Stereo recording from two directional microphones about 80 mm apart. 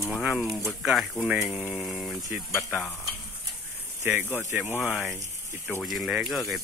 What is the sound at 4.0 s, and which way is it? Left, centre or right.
Speech, right.